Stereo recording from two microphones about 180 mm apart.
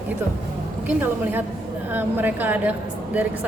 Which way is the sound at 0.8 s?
10° right (ahead or behind).